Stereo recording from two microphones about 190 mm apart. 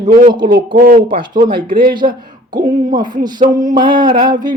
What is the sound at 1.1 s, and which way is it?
Speech, 25° right (ahead or behind).